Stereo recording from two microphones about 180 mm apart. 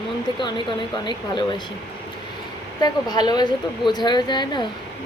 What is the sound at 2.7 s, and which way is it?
A woman's voice, 25° left (ahead or behind).